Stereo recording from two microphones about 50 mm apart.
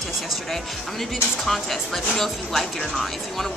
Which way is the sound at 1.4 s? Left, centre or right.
Centre.